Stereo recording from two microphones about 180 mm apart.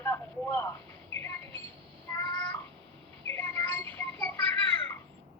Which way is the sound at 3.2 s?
15° left (ahead or behind).